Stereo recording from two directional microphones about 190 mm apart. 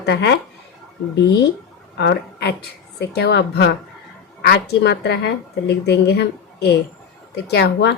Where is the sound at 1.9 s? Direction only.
60° left (ahead or behind).